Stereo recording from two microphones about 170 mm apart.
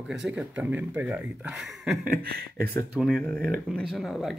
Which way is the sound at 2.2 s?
65° right (ahead or behind).